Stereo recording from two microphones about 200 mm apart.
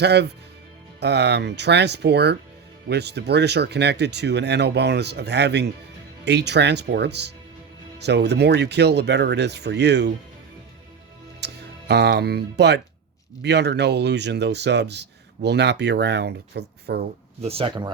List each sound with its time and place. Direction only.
0.0 s speech: 55° right (ahead or behind)
11.3 s speech: 55° right (ahead or behind)
17.4 s speech: 30° right (ahead or behind)